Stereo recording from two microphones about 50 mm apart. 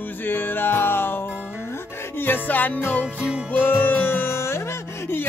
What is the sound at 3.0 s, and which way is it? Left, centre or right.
Music, right.